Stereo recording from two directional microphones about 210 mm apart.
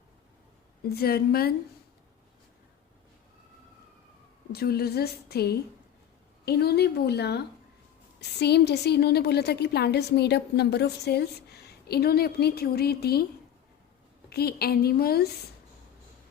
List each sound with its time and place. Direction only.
0.9 s a woman's voice: 45° left (ahead or behind)
4.5 s a woman's voice: 50° left (ahead or behind)
14.3 s a woman's voice: 50° left (ahead or behind)